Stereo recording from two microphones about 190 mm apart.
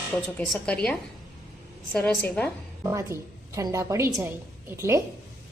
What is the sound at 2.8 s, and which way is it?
A woman's voice, 15° right (ahead or behind).